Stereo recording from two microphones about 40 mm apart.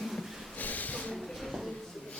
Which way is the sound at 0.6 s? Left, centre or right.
Left.